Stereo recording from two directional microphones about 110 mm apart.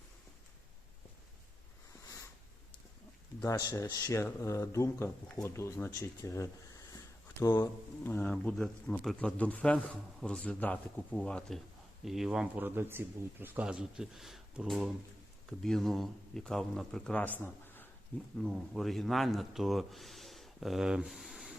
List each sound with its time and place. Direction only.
3.4 s speech: 30° left (ahead or behind)
6.9 s a sound: 35° left (ahead or behind)
7.5 s speech: 20° left (ahead or behind); by 12.5 s 5° right (ahead or behind)
12.5 s speech: 20° right (ahead or behind)
13.7 s speech: 5° right (ahead or behind)
15.4 s speech: 5° left (ahead or behind)
18.5 s speech: 5° right (ahead or behind)